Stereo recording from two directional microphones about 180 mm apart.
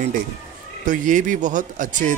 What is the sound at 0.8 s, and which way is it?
A man's voice, 45° right (ahead or behind).